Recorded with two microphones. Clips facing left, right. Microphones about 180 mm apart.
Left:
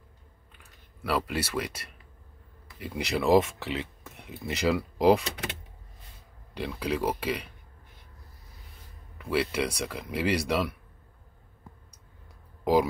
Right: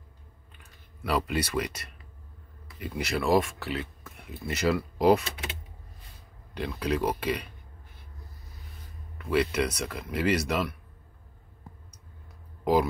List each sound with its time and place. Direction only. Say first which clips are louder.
0.6 s speech: right 1 dB; 5° left (ahead or behind)
6.5 s speech: right 1 dB; 10° left (ahead or behind)
9.2 s speech: right 2 dB; 10° left (ahead or behind)